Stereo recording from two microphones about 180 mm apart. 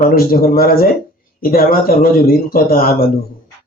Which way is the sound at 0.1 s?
55° left (ahead or behind).